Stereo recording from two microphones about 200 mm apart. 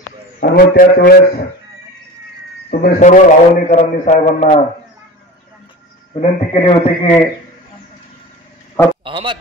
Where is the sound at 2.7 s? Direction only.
45° left (ahead or behind).